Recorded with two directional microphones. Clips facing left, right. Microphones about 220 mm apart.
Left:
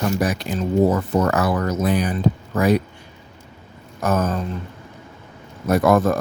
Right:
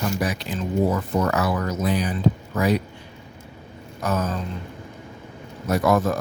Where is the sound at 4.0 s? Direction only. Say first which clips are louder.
Left 4 dB; 50° left (ahead or behind).